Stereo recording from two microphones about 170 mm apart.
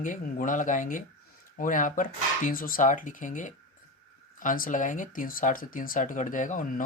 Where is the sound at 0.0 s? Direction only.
50° left (ahead or behind).